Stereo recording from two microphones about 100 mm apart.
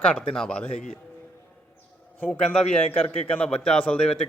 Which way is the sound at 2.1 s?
15° left (ahead or behind).